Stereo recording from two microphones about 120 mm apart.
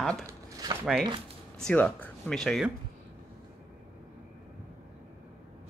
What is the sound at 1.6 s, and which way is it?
Speech, 10° left (ahead or behind).